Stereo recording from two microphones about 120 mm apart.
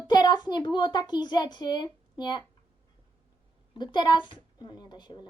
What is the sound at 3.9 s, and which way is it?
Speech, 40° left (ahead or behind).